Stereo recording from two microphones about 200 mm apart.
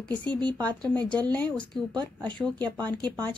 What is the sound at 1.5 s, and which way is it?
Speech, 5° left (ahead or behind).